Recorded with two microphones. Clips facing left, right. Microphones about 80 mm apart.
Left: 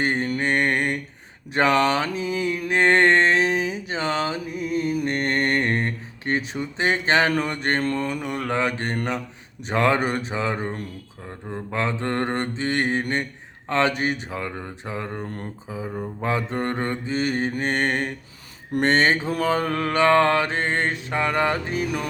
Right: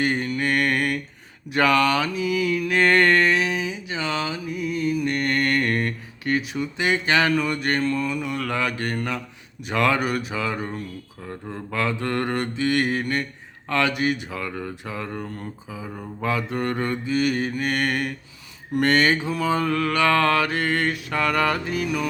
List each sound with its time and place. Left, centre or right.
0.0 s mantra: left
1.5 s a sound: left
9.6 s speech: left
11.3 s speech: centre
11.7 s mantra: left
13.7 s speech: left
19.3 s mantra: left
21.8 s speech: left